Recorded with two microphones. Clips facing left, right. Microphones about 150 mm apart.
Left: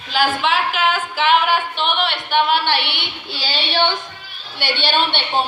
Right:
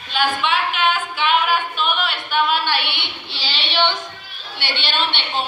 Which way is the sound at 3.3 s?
45° left (ahead or behind).